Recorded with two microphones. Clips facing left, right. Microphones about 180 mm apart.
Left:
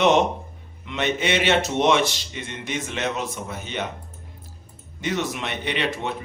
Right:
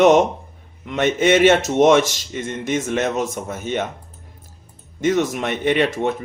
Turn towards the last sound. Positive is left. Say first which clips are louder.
# right 8 dB
turn(degrees=-45)  # may be behind; listen again after turning